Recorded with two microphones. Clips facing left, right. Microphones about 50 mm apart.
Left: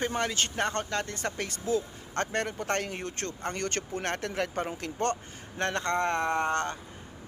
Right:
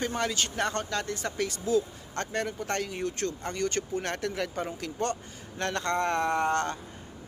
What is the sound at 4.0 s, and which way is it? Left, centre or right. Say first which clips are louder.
Speech: left 4 dB; left.